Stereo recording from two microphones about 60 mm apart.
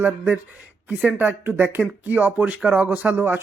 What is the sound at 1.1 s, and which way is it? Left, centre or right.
Speech, right.